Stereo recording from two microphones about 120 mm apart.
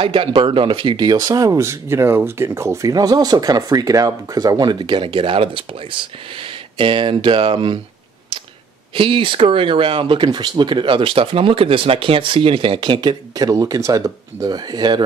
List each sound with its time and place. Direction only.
0.0 s speech: 50° right (ahead or behind)
8.9 s speech: 45° right (ahead or behind)